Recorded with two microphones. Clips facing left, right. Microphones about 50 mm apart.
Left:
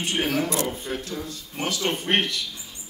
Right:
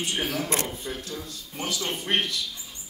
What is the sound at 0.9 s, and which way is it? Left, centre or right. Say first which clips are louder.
Speech: left 4 dB; left.